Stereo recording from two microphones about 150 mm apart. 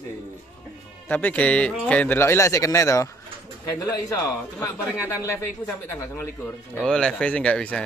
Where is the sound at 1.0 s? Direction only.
10° left (ahead or behind).